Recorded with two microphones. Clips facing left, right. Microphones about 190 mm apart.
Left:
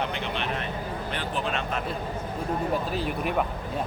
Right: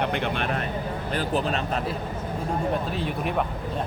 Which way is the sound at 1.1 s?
40° right (ahead or behind).